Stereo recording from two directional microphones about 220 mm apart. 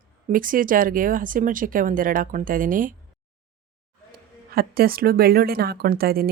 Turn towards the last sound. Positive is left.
turn(degrees=-45)  # may be behind; listen again after turning